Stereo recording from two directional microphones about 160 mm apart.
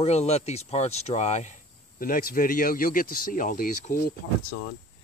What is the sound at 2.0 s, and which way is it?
Speech, 60° left (ahead or behind).